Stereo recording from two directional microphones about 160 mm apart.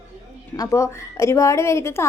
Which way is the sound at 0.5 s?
20° left (ahead or behind).